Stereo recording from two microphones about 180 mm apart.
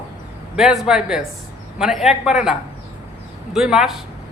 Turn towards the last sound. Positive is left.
turn(degrees=-5)  # may be behind; listen again after turning